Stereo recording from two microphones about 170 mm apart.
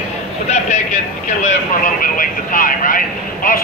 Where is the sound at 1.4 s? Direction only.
50° left (ahead or behind).